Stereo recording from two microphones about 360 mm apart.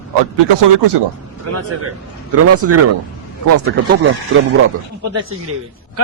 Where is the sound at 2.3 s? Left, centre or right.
Right.